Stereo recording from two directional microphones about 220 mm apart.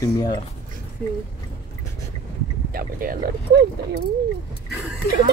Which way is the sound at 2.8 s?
40° right (ahead or behind).